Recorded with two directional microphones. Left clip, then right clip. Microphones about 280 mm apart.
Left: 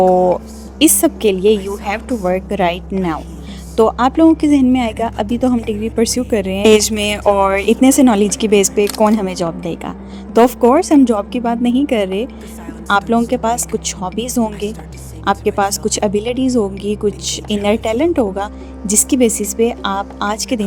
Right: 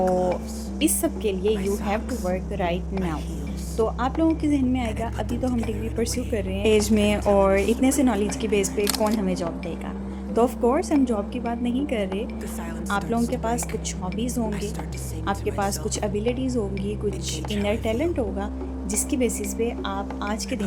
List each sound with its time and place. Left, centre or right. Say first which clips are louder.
0.8 s speech: left 12 dB; left
1.5 s speech: left 5 dB; centre
2.2 s speech: left 15 dB; left
8.8 s speech: left 10 dB; centre
9.2 s speech: left 8 dB; left